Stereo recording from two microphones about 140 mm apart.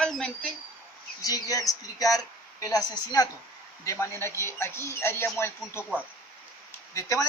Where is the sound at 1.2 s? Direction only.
25° left (ahead or behind).